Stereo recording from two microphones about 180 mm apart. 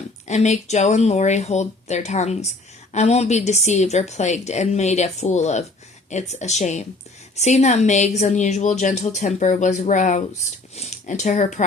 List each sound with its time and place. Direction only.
0.3 s a woman's voice: 40° left (ahead or behind)